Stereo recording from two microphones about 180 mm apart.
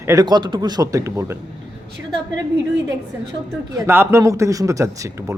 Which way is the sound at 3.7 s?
15° right (ahead or behind).